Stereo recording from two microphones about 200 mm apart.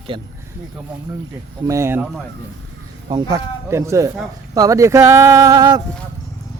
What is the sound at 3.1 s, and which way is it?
Speech, 20° right (ahead or behind).